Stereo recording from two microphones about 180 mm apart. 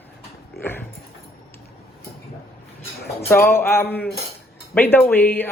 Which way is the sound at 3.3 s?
15° left (ahead or behind).